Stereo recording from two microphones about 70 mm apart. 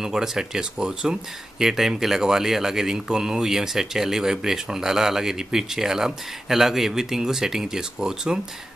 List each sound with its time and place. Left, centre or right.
0.0 s speech: centre